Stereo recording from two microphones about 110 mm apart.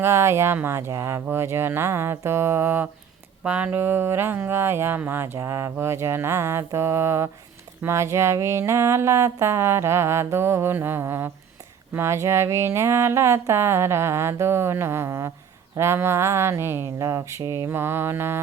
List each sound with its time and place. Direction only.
0.0 s speech: 25° right (ahead or behind)
17.7 s speech: 20° right (ahead or behind)